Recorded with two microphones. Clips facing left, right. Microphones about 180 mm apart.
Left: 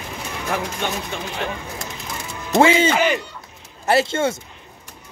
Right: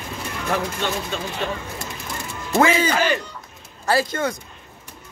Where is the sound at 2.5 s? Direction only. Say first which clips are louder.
Left 3 dB; 25° left (ahead or behind).